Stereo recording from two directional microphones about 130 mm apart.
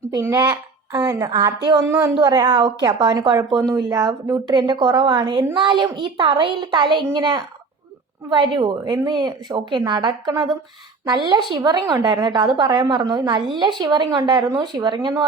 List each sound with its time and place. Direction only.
0.2 s a woman's voice: 25° right (ahead or behind)
1.8 s a woman's voice: 15° right (ahead or behind)
2.1 s a woman's voice: 30° right (ahead or behind)